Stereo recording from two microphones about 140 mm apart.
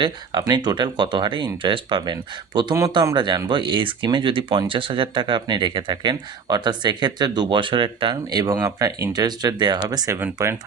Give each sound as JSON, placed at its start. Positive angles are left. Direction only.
{"t": 0.0, "sound": "speech", "side_deg": -30}